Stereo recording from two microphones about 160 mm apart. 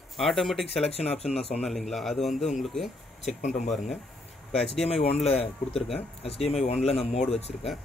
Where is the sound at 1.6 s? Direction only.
Centre (ahead or behind).